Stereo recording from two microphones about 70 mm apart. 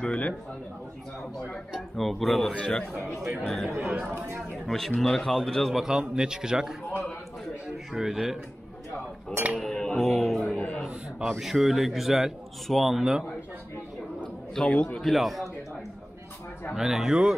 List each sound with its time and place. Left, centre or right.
0.0 s speech: centre
1.5 s a man's voice: centre
7.9 s a man's voice: centre
9.6 s music: centre
10.0 s music: centre
10.3 s a sound: centre
11.2 s a man's voice: centre
14.5 s a man's voice: centre
15.0 s a man's voice: centre
16.7 s a man's voice: centre